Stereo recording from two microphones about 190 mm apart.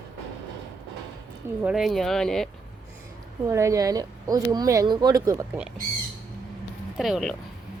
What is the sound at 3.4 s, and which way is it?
Speech, 15° right (ahead or behind).